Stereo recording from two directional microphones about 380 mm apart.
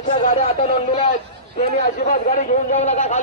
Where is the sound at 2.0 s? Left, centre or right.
Centre.